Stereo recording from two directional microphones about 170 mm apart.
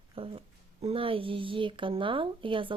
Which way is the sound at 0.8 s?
35° right (ahead or behind).